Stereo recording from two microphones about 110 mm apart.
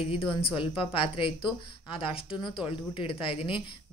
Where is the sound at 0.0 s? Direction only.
60° left (ahead or behind).